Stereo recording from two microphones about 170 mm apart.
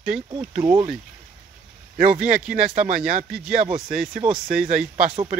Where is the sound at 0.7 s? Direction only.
15° right (ahead or behind).